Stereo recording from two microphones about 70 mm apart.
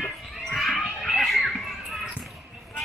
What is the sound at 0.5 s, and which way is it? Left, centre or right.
Children playing, centre.